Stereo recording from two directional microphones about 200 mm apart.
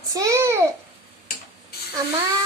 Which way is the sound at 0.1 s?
15° right (ahead or behind).